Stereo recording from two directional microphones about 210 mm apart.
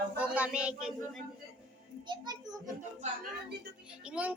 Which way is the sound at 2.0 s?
20° right (ahead or behind).